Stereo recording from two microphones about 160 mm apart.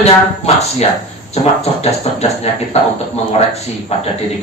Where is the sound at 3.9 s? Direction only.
40° left (ahead or behind).